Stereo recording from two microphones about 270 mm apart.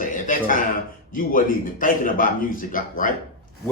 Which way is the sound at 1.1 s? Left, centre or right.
Left.